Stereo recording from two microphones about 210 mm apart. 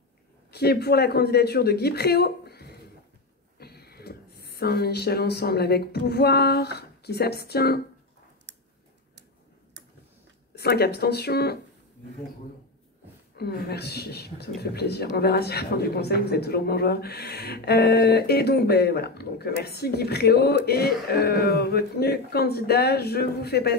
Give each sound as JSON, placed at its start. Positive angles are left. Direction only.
{"t": 0.5, "sound": "speech", "side_deg": 50}
{"t": 8.5, "sound": "a sound", "side_deg": -55}
{"t": 10.5, "sound": "speech", "side_deg": 50}
{"t": 13.4, "sound": "speech", "side_deg": 50}